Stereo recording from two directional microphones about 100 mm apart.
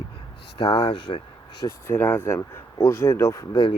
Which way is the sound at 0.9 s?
65° left (ahead or behind).